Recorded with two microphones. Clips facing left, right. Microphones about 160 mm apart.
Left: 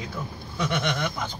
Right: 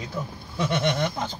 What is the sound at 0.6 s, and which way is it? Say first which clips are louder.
Speech: right 3 dB; 30° right (ahead or behind).